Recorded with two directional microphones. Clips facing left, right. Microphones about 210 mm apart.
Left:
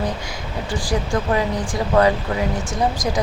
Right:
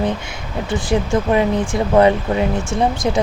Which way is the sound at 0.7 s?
20° right (ahead or behind).